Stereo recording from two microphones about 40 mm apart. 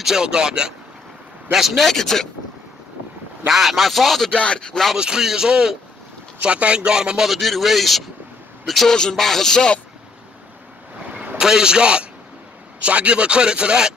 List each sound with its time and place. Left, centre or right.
0.0 s a man's voice: centre
1.5 s a man's voice: centre
1.9 s music: centre
3.4 s speech: centre
4.3 s speech: left
4.9 s a man's voice: centre
6.4 s speech: right
7.2 s speech: centre
8.8 s music: centre
11.3 s speech: centre